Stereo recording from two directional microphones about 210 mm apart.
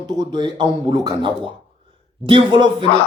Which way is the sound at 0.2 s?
20° right (ahead or behind).